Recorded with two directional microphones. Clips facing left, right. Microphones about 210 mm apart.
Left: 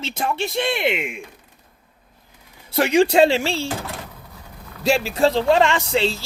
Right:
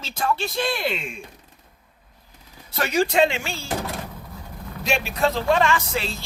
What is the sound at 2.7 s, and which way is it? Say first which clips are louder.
Speech: left 6 dB; 30° left (ahead or behind).